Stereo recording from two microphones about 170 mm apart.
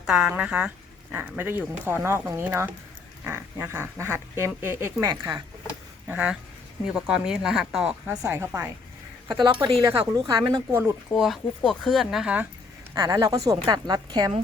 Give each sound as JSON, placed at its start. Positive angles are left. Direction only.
{"t": 0.0, "sound": "speech", "side_deg": -5}
{"t": 6.1, "sound": "speech", "side_deg": -10}
{"t": 9.3, "sound": "a woman's voice", "side_deg": -25}
{"t": 11.1, "sound": "speech", "side_deg": 0}
{"t": 12.9, "sound": "a woman's voice", "side_deg": -25}